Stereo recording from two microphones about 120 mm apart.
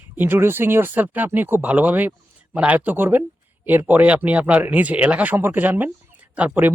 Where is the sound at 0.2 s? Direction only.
20° right (ahead or behind).